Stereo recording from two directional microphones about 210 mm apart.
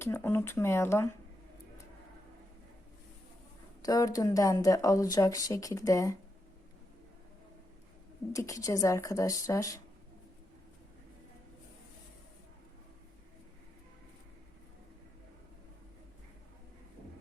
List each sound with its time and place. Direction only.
0.0 s speech: 10° left (ahead or behind)
3.8 s speech: 15° left (ahead or behind)
8.3 s speech: 15° left (ahead or behind)